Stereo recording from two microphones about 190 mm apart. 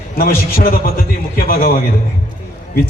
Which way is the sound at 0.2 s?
50° left (ahead or behind).